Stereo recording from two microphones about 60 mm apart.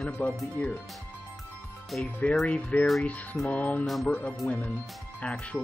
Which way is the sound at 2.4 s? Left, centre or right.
Left.